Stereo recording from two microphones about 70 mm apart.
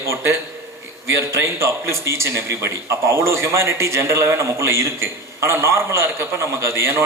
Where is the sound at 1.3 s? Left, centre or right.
Right.